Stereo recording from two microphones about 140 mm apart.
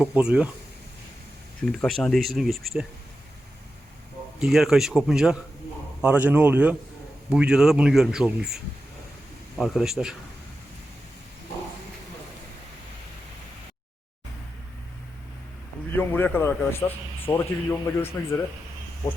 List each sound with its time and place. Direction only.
0.0 s speech: 5° right (ahead or behind)
1.8 s a man's voice: 5° left (ahead or behind)
4.4 s a man's voice: centre (ahead or behind)
16.0 s a man's voice: 15° left (ahead or behind)